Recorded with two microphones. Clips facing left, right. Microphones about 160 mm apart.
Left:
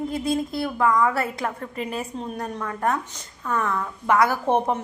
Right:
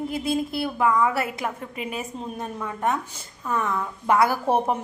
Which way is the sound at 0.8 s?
10° right (ahead or behind).